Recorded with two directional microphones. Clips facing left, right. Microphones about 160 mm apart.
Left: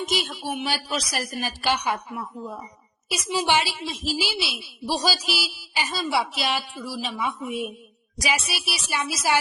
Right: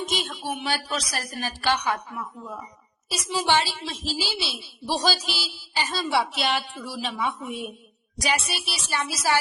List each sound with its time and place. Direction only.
0.0 s a woman's voice: 5° left (ahead or behind)